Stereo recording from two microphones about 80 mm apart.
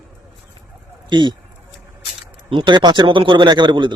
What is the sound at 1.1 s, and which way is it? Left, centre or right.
Speech, right.